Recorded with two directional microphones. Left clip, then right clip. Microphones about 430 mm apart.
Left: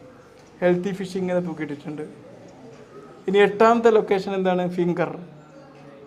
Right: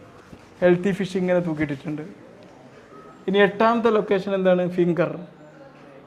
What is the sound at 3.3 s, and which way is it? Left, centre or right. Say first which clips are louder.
A man's voice: left 2 dB; centre.